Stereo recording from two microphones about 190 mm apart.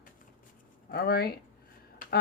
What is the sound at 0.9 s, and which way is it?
Speech, 55° left (ahead or behind).